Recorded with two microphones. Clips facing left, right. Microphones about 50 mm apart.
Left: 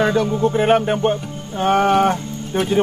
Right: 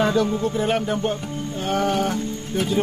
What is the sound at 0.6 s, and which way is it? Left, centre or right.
Speech, left.